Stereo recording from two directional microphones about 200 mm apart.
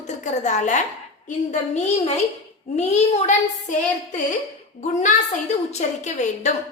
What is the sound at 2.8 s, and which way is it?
Speech, 35° left (ahead or behind).